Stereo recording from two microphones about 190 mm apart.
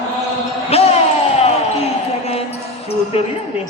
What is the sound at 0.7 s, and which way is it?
Basketball bounce, 30° left (ahead or behind).